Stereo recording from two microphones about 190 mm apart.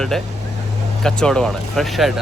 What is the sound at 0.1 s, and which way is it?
Speech, centre (ahead or behind).